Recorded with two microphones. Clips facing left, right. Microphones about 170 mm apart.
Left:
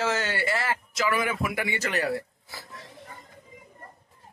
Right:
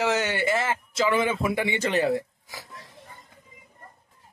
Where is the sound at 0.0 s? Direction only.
20° right (ahead or behind).